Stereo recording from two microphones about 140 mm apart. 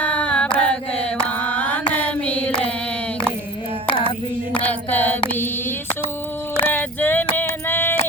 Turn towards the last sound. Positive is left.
turn(degrees=15)  # may be behind; listen again after turning